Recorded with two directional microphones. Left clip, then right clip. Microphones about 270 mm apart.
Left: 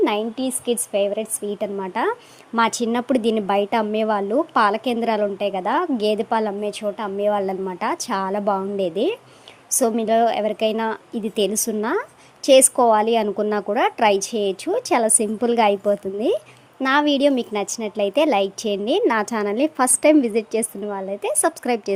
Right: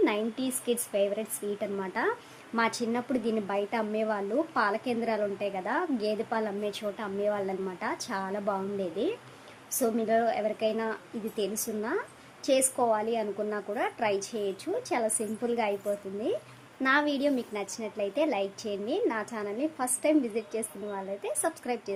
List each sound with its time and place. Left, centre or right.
0.0 s a woman's voice: left